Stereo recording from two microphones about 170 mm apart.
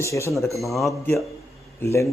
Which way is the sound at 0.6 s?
Centre (ahead or behind).